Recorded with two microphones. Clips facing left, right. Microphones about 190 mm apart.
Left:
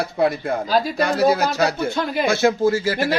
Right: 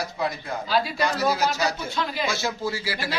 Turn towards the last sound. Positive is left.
turn(degrees=45)  # may be behind; listen again after turning